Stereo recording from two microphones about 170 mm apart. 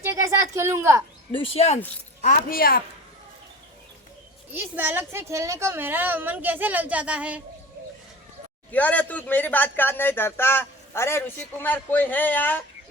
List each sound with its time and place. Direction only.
0.0 s a woman's voice: 20° right (ahead or behind)
1.3 s speech: 35° left (ahead or behind)
2.2 s speech: 55° left (ahead or behind)
4.5 s a woman's voice: 10° right (ahead or behind)
8.7 s speech: 10° left (ahead or behind)